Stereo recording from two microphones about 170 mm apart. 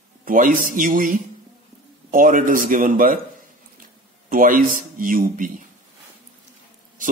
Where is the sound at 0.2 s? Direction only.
55° right (ahead or behind).